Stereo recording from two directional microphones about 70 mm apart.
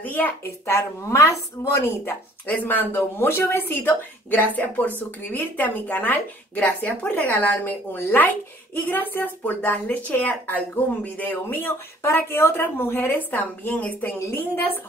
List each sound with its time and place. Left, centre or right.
0.0 s a woman's voice: left
0.7 s speech: left
2.0 s a woman's voice: left
14.2 s speech: left